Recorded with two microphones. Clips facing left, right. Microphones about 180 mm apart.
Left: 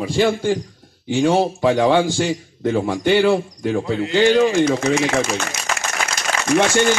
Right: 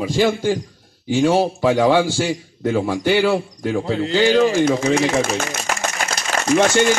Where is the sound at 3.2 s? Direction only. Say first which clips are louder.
Left 2 dB; 15° left (ahead or behind).